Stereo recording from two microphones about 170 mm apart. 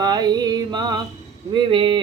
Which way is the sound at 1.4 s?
30° right (ahead or behind).